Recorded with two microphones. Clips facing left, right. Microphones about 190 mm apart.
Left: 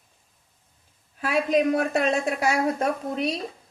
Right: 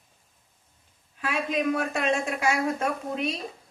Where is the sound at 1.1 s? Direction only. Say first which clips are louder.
Left 6 dB; 35° left (ahead or behind).